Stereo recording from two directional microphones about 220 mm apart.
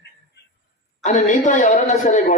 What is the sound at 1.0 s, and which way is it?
A man's voice, 35° left (ahead or behind).